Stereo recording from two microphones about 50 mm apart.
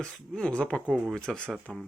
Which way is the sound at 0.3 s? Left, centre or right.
Centre.